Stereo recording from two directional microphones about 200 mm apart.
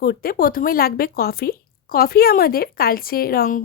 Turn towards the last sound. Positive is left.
turn(degrees=45)  # may be behind; listen again after turning